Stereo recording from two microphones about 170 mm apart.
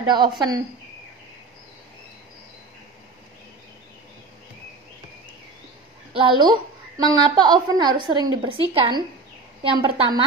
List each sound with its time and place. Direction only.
0.0 s speech: 25° right (ahead or behind)
6.1 s a woman's voice: 30° right (ahead or behind)